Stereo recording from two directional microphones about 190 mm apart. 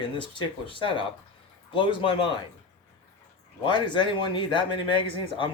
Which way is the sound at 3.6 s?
25° left (ahead or behind).